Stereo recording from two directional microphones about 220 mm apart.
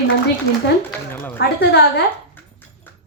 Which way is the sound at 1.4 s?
50° left (ahead or behind).